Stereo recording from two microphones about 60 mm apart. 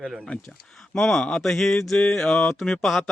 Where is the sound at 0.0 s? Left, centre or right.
Centre.